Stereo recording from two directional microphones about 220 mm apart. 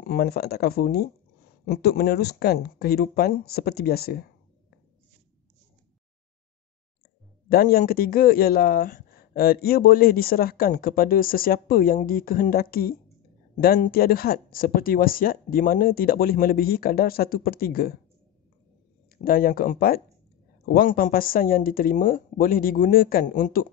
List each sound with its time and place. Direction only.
0.0 s speech: 45° left (ahead or behind)
7.4 s speech: 45° left (ahead or behind)
19.2 s speech: 40° left (ahead or behind)